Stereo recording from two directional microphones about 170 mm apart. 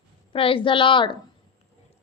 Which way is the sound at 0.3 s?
30° left (ahead or behind).